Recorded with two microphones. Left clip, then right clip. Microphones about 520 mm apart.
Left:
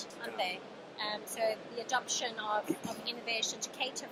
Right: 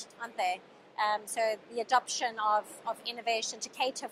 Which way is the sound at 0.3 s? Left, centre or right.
Right.